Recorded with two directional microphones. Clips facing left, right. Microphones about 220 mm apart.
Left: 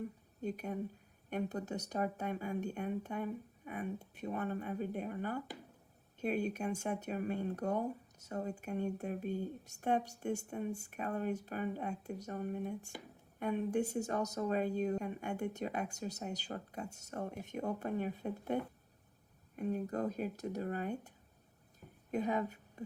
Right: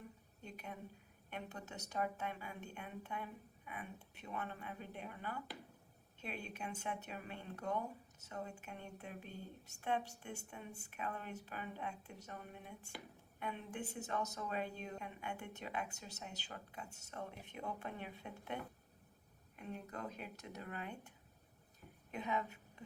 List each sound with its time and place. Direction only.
0.4 s speech: 40° left (ahead or behind)
22.1 s a woman's voice: 40° left (ahead or behind)